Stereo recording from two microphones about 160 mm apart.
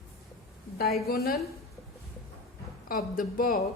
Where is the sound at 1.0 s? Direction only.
75° left (ahead or behind).